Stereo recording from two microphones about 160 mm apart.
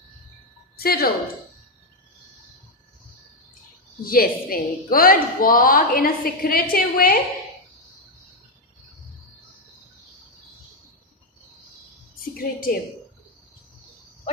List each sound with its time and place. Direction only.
0.8 s a woman's voice: 70° left (ahead or behind)
4.0 s a woman's voice: 65° left (ahead or behind)
12.4 s a woman's voice: 65° left (ahead or behind)